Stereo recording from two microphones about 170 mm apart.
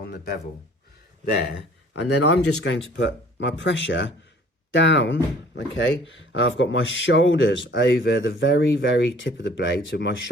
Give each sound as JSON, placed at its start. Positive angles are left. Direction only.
{"t": 0.0, "sound": "speech", "side_deg": 65}
{"t": 2.0, "sound": "speech", "side_deg": 90}